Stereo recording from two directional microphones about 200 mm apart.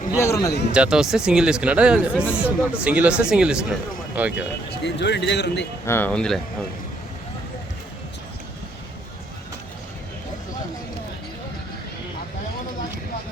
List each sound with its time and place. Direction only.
0.2 s speech: 15° left (ahead or behind)
0.7 s speech: 5° right (ahead or behind)
4.8 s speech: 60° left (ahead or behind)
5.8 s speech: 10° left (ahead or behind)